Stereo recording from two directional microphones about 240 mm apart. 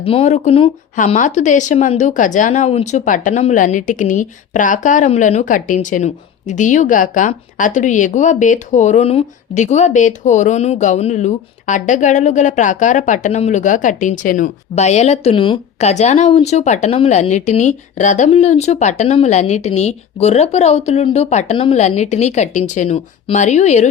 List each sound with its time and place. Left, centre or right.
0.0 s a woman's voice: left